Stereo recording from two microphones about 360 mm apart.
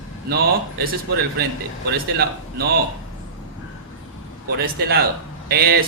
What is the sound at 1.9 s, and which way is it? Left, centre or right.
Speech, right.